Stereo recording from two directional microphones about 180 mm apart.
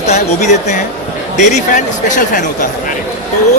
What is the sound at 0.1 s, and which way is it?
Speech, 45° left (ahead or behind).